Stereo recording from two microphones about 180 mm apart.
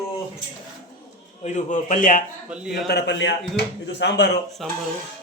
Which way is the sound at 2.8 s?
70° left (ahead or behind).